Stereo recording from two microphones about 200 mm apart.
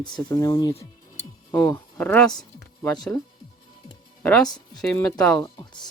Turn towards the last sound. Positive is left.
turn(degrees=20)  # may be behind; listen again after turning